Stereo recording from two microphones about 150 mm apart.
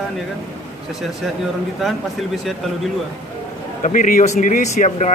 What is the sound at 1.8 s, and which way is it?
Speech, centre (ahead or behind).